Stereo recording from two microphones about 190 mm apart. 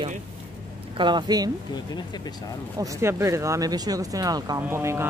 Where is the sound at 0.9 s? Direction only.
25° right (ahead or behind).